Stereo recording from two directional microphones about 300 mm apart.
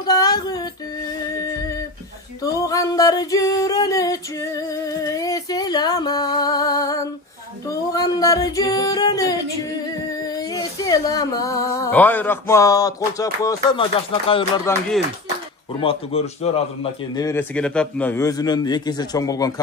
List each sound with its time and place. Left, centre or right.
0.0 s music: centre
1.3 s a sound: centre
2.4 s singing: centre
7.6 s music: centre
10.1 s a sound: centre
14.3 s a man's voice: centre
17.1 s a man's voice: centre